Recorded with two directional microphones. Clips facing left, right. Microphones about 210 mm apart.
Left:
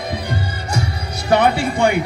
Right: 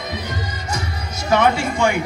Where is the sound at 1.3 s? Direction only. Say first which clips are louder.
Left 2 dB; 35° left (ahead or behind).